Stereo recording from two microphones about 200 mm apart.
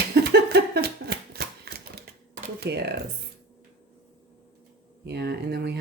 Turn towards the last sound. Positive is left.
turn(degrees=-55)  # may be behind; listen again after turning